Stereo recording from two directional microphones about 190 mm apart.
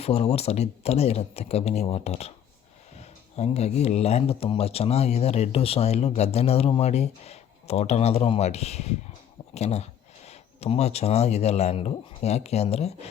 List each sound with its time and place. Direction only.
0.0 s speech: 35° left (ahead or behind)
3.3 s speech: 35° left (ahead or behind)